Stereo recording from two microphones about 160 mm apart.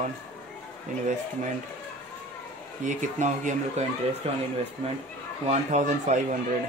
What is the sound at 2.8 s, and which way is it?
Speech, 50° right (ahead or behind).